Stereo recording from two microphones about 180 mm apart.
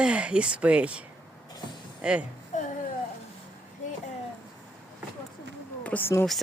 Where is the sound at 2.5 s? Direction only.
40° left (ahead or behind).